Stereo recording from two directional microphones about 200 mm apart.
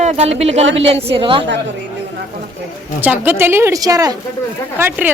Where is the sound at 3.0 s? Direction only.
10° right (ahead or behind).